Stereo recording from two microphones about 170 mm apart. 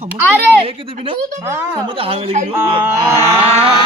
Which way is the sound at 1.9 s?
35° right (ahead or behind).